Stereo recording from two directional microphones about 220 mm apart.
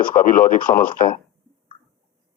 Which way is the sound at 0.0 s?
40° left (ahead or behind).